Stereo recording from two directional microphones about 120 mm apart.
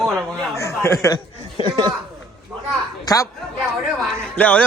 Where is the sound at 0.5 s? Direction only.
25° left (ahead or behind).